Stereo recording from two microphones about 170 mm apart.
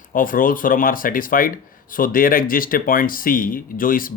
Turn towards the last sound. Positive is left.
turn(degrees=55)  # may be behind; listen again after turning